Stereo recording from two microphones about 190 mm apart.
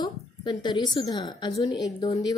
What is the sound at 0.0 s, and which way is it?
A woman's voice, 25° left (ahead or behind).